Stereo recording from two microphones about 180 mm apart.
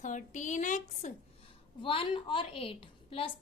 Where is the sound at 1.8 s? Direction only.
30° left (ahead or behind).